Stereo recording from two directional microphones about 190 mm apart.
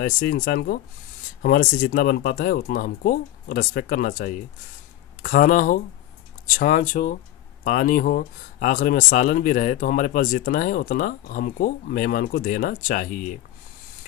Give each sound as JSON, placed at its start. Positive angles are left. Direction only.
{"t": 0.0, "sound": "speech", "side_deg": 50}